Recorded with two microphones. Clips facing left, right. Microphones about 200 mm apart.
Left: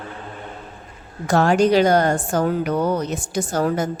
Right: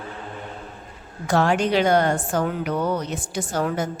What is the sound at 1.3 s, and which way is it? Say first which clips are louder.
A woman's voice: left 4 dB; 45° left (ahead or behind).